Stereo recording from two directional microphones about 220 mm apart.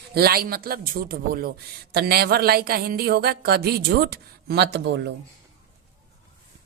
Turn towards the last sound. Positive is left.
turn(degrees=-50)  # may be behind; listen again after turning